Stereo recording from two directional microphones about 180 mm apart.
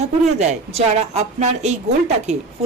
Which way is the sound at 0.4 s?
40° right (ahead or behind).